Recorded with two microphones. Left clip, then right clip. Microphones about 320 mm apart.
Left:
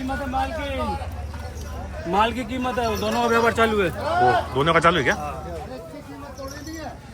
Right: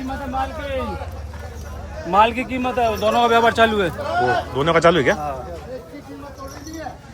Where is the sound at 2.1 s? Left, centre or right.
Centre.